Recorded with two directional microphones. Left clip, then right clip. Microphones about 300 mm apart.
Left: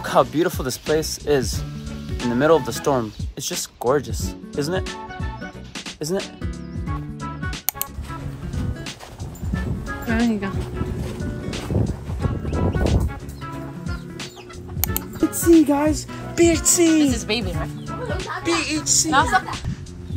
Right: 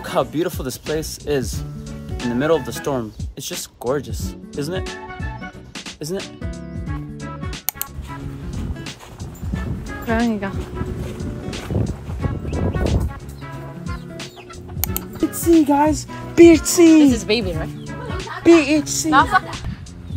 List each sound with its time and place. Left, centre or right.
0.0 s speech: centre
5.9 s speech: centre
7.2 s music: centre
9.8 s speech: centre
11.1 s music: centre
14.8 s music: centre
15.6 s speech: right
16.8 s a woman's voice: centre
17.3 s music: centre
18.4 s music: centre
19.0 s music: centre